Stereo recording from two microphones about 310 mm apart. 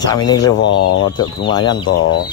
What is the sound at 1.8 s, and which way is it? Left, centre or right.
Speech, left.